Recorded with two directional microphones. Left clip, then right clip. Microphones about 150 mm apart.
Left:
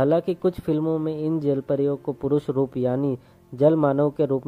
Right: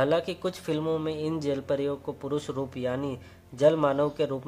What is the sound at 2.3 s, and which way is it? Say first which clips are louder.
Speech: left 9 dB; 55° left (ahead or behind).